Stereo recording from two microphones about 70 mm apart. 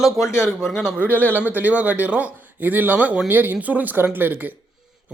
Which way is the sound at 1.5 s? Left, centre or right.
Right.